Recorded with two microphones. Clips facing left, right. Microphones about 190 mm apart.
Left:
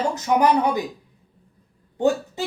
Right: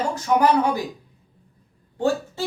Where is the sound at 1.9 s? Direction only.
20° left (ahead or behind).